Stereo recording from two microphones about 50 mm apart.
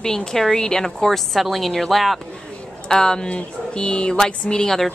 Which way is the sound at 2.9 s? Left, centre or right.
Centre.